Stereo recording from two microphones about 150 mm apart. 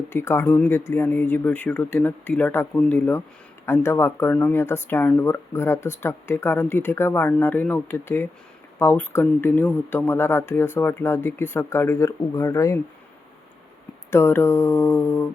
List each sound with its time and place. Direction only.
0.1 s speech: 15° left (ahead or behind)
14.1 s speech: 15° left (ahead or behind)